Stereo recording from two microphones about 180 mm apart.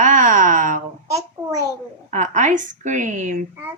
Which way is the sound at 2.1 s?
45° right (ahead or behind).